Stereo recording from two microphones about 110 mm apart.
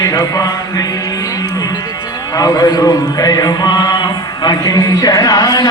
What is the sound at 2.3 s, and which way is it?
Chant, 35° left (ahead or behind).